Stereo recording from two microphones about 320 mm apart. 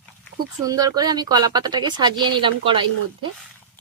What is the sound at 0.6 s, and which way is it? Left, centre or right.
Speech, centre.